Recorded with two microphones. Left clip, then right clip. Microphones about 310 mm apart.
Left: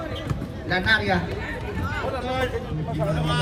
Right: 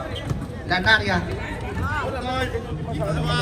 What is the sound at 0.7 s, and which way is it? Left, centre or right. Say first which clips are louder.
Speech: right 2 dB; centre.